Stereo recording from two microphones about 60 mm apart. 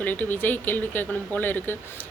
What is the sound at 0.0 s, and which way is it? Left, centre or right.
A woman's voice, left.